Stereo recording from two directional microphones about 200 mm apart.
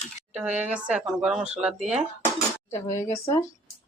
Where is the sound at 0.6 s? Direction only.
5° right (ahead or behind).